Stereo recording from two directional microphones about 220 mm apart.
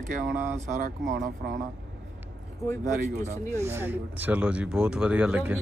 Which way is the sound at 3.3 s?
10° right (ahead or behind).